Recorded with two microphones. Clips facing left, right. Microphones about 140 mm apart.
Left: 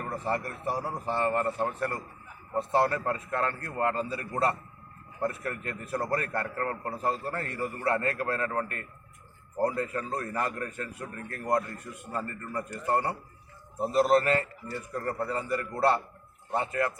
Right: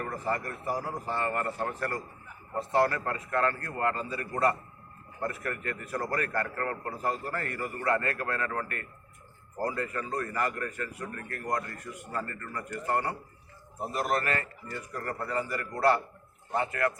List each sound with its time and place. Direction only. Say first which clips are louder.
0.1 s a man's voice: left 1 dB; 25° left (ahead or behind)